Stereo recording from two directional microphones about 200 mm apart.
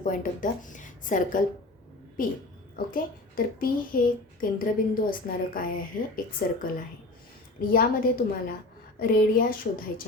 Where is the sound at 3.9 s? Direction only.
45° left (ahead or behind).